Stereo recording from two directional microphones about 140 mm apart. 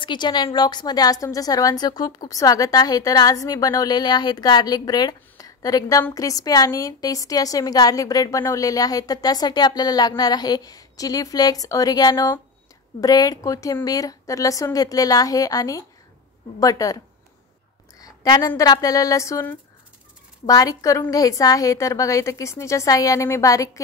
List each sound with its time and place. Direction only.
0.0 s a woman's voice: 30° left (ahead or behind)
17.9 s a sound: 25° left (ahead or behind)
18.6 s a woman's voice: 25° left (ahead or behind)